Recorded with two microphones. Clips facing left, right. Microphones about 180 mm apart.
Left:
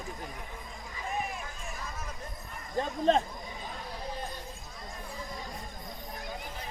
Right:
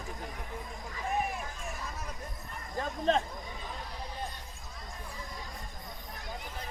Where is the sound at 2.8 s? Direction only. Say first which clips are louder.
Left 3 dB; 30° left (ahead or behind).